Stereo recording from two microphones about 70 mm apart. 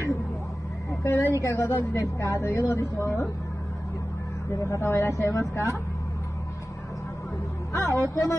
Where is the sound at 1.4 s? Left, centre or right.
Left.